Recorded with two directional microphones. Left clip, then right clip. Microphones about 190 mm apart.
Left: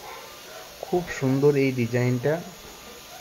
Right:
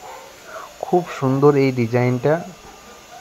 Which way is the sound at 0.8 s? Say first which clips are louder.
Right 8 dB; 25° right (ahead or behind).